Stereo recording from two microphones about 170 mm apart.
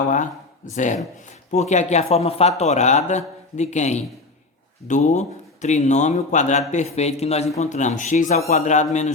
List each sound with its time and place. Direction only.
0.8 s a man's voice: 45° left (ahead or behind)